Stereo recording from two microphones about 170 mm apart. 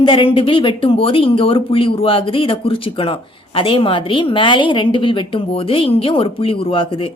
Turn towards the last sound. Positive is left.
turn(degrees=30)  # may be behind; listen again after turning